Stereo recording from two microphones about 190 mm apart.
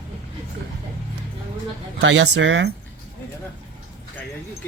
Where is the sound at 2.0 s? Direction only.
65° right (ahead or behind).